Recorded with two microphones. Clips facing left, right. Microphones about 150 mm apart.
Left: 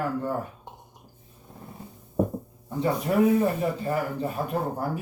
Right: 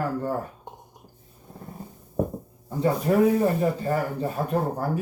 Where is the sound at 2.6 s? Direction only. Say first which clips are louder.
Right 3 dB; 40° right (ahead or behind).